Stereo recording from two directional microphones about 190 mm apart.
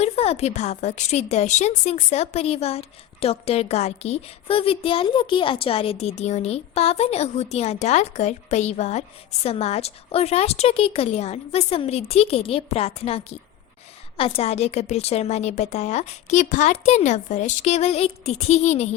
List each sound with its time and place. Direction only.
0.0 s a woman's voice: 35° left (ahead or behind)